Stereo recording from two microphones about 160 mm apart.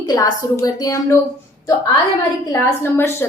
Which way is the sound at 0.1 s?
25° left (ahead or behind).